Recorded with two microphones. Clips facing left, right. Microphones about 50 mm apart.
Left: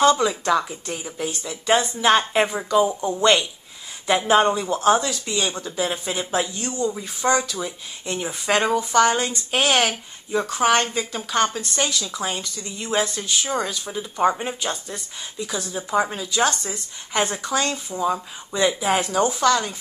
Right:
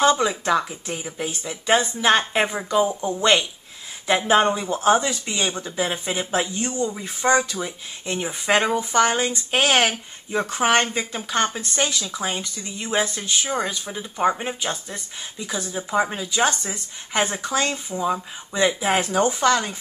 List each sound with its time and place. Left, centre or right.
0.0 s speech: centre
1.7 s speech: centre
4.6 s speech: centre
5.4 s speech: centre
8.2 s speech: centre
18.8 s speech: right